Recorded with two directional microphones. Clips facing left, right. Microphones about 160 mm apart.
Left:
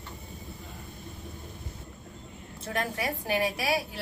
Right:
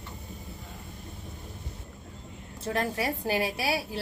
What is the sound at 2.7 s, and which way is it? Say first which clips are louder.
Speech: right 2 dB; 30° right (ahead or behind).